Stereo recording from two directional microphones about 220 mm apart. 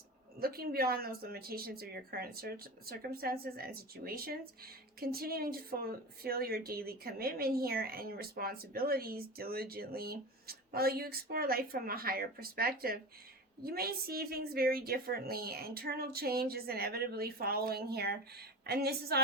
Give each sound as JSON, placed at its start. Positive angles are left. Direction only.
{"t": 0.3, "sound": "speech", "side_deg": -45}